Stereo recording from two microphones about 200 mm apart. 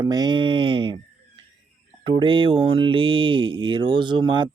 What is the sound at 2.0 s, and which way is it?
Speech, 25° right (ahead or behind).